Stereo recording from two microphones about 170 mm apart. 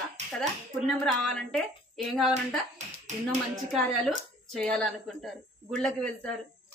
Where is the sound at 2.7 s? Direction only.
45° right (ahead or behind).